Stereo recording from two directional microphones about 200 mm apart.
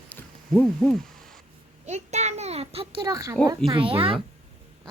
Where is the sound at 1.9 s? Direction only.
35° right (ahead or behind); by 3.3 s 15° right (ahead or behind).